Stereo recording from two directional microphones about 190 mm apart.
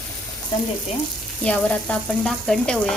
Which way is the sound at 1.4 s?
5° left (ahead or behind).